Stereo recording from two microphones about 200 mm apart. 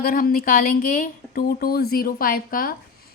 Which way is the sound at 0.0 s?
45° left (ahead or behind).